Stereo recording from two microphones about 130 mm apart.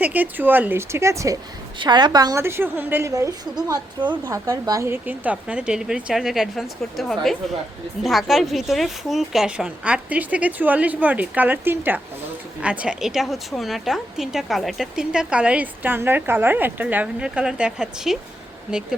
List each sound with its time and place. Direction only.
0.0 s a woman's voice: 15° right (ahead or behind)
1.8 s a woman's voice: 35° right (ahead or behind)
2.4 s a woman's voice: 20° right (ahead or behind)